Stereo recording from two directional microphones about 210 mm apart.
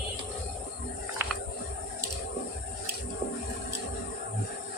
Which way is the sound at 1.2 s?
10° right (ahead or behind).